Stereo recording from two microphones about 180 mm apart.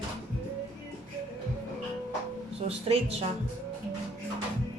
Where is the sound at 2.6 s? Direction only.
35° right (ahead or behind).